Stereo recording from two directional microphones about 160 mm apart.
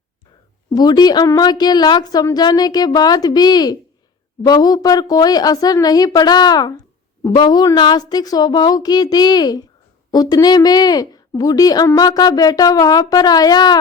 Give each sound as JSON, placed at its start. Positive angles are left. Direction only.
{"t": 0.7, "sound": "speech", "side_deg": 25}